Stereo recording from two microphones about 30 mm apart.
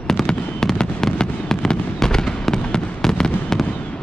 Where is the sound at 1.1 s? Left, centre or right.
Left.